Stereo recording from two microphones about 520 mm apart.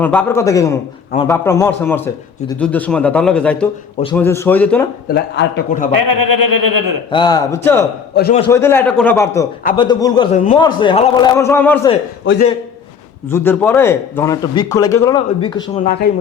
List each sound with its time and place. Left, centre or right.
0.0 s a man's voice: centre
5.0 s a man's voice: centre
5.9 s speech: right
7.1 s a man's voice: centre
8.1 s a man's voice: centre
12.2 s a man's voice: left
13.2 s a man's voice: centre